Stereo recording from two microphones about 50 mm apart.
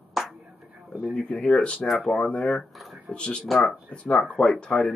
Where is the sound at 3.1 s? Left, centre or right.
Left.